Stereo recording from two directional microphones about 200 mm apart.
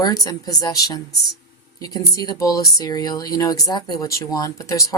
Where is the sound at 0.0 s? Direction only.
20° left (ahead or behind).